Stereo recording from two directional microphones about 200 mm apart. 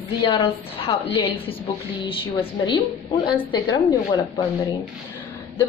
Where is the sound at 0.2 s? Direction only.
25° left (ahead or behind).